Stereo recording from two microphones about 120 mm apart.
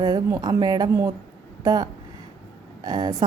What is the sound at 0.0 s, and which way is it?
A woman's voice, 30° right (ahead or behind).